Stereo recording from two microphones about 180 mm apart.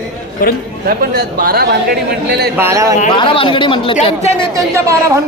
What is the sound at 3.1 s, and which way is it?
Speech, 30° left (ahead or behind).